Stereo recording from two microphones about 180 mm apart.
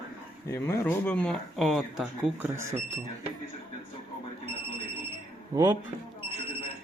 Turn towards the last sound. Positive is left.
turn(degrees=-20)  # may be behind; listen again after turning